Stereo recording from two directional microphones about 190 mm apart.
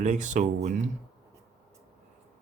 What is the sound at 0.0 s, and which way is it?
Speech, 40° right (ahead or behind).